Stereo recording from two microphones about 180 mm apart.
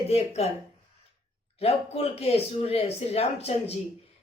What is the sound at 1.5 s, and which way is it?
Speech, 35° left (ahead or behind).